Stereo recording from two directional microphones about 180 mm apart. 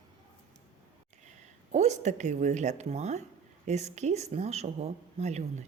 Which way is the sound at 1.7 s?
40° right (ahead or behind).